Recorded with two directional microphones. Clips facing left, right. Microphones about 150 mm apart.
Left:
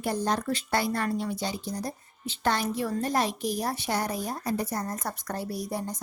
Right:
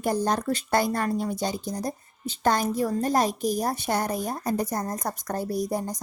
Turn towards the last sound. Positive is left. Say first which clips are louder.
# right 5 dB
turn(degrees=-40)  # may be behind; listen again after turning